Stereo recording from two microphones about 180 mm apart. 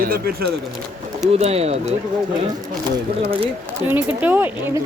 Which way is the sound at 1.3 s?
35° right (ahead or behind).